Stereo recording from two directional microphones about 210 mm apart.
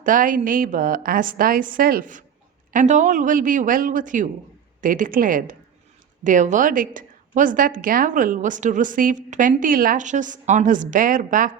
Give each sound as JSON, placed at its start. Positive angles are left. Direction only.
{"t": 0.0, "sound": "a woman's voice", "side_deg": -40}